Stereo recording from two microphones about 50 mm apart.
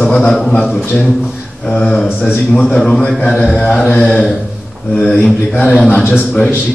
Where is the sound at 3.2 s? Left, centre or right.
Left.